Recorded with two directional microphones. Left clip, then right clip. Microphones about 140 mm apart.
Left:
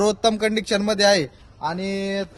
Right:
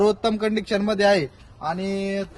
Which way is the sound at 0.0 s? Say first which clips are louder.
Left 1 dB; 90° left.